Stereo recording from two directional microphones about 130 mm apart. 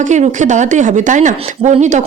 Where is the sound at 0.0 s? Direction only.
70° right (ahead or behind).